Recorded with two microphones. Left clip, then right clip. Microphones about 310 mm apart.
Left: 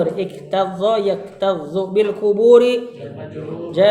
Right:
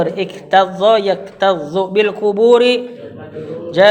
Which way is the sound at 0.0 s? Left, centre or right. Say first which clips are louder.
Right 2 dB; right.